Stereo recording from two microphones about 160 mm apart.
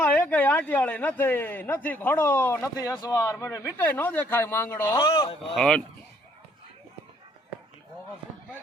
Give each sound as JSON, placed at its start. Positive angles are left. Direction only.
{"t": 0.0, "sound": "speech", "side_deg": 10}
{"t": 5.0, "sound": "speech", "side_deg": 25}
{"t": 5.5, "sound": "speech", "side_deg": 5}